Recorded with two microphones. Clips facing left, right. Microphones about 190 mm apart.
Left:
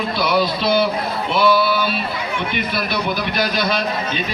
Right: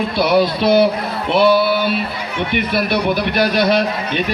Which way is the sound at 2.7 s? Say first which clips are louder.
Right 7 dB; 60° right (ahead or behind).